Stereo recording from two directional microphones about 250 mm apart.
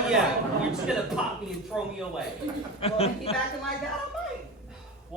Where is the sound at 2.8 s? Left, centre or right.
Left.